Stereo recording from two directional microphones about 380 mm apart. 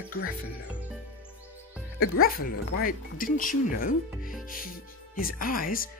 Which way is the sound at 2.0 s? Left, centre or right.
Left.